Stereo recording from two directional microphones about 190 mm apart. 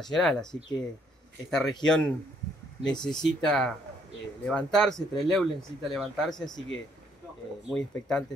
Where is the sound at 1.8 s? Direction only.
5° left (ahead or behind).